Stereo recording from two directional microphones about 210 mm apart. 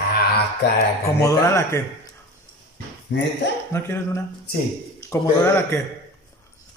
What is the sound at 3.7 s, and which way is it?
A man's voice, 10° left (ahead or behind).